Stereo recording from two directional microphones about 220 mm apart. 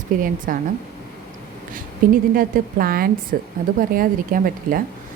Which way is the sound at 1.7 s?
40° right (ahead or behind).